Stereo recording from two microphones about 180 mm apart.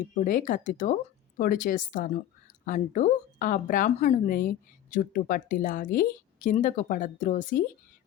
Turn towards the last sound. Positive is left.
turn(degrees=45)  # may be behind; listen again after turning